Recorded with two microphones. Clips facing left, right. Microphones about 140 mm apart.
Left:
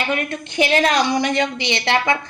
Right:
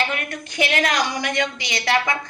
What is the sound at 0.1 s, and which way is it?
A woman's voice, 25° left (ahead or behind).